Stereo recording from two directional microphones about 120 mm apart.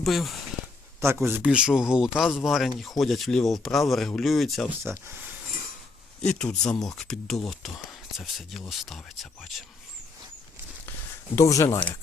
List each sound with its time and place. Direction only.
0.0 s speech: centre (ahead or behind)
1.0 s a man's voice: 20° right (ahead or behind)
1.4 s speech: 5° right (ahead or behind)
6.2 s speech: 5° left (ahead or behind)
11.3 s speech: 25° left (ahead or behind)